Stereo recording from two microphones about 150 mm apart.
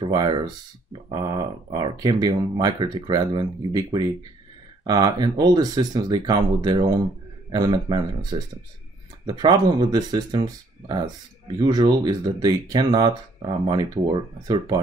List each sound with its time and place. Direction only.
0.0 s speech: 30° right (ahead or behind)